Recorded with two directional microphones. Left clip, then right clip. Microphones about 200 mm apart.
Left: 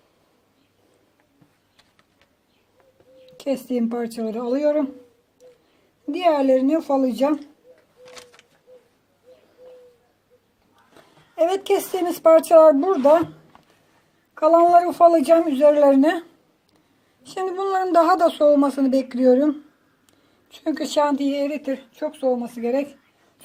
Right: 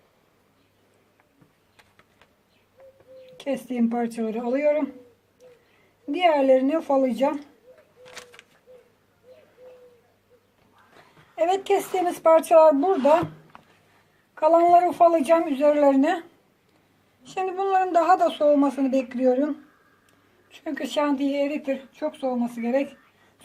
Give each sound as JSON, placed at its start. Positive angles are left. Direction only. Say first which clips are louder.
{"t": 1.7, "sound": "insect", "louder": "right 4 dB", "side_deg": 10}
{"t": 3.3, "sound": "a woman's voice", "louder": "left 4 dB", "side_deg": 30}
{"t": 6.1, "sound": "a woman's voice", "louder": "left 1 dB", "side_deg": 30}
{"t": 8.0, "sound": "a sound", "louder": "even", "side_deg": 5}
{"t": 11.3, "sound": "speech", "louder": "left 2 dB", "side_deg": 40}
{"t": 14.3, "sound": "a woman's voice", "louder": "left 3 dB", "side_deg": 30}
{"t": 17.2, "sound": "a woman's voice", "louder": "left 1 dB", "side_deg": 45}